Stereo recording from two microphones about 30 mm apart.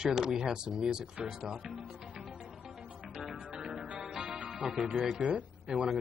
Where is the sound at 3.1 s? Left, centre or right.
Centre.